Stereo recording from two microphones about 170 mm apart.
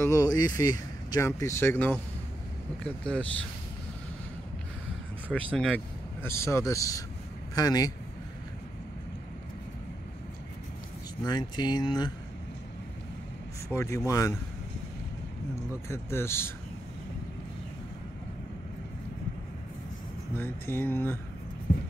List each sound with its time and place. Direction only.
0.0 s speech: 20° left (ahead or behind)
5.3 s speech: 5° left (ahead or behind); by 7.9 s 20° left (ahead or behind)
11.2 s speech: 25° left (ahead or behind)
13.7 s speech: 15° left (ahead or behind)
15.9 s speech: 15° left (ahead or behind)
20.3 s speech: 15° left (ahead or behind)
21.7 s a sound: 55° left (ahead or behind)